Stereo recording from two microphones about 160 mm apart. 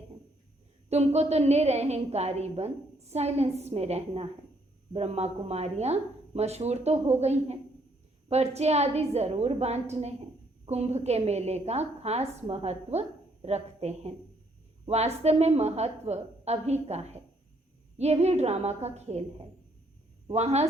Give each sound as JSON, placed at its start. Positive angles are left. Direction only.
{"t": 0.9, "sound": "a woman's voice", "side_deg": -45}
{"t": 20.2, "sound": "a woman's voice", "side_deg": -40}